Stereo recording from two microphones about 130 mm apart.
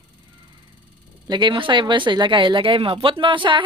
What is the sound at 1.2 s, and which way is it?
Speech, 35° right (ahead or behind).